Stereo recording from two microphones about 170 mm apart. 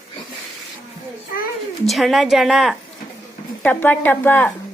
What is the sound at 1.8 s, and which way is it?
Speech, centre (ahead or behind).